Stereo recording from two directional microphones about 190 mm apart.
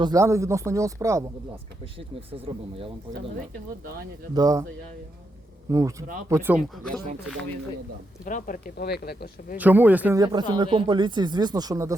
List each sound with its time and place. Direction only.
0.0 s speech: 15° right (ahead or behind)
1.8 s speech: 30° right (ahead or behind)
4.4 s speech: 20° right (ahead or behind)
5.7 s speech: 15° right (ahead or behind)
6.6 s speech: 5° left (ahead or behind)
8.2 s speech: 45° left (ahead or behind)
8.7 s speech: 60° left (ahead or behind)
9.6 s speech: 10° right (ahead or behind)
10.2 s speech: 20° right (ahead or behind)